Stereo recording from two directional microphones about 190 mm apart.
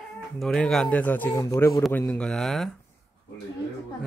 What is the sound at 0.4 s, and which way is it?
Speech, 5° left (ahead or behind).